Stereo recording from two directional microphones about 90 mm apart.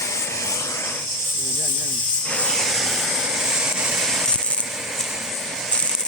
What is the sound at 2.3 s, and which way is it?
Vehicle, 10° left (ahead or behind).